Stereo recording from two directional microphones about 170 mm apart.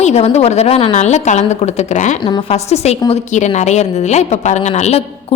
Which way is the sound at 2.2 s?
30° left (ahead or behind).